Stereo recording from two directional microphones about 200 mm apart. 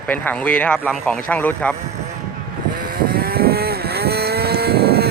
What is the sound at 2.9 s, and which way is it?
Vehicle, 45° right (ahead or behind).